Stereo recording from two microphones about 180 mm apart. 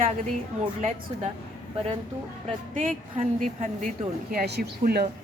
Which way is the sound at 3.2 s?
40° right (ahead or behind).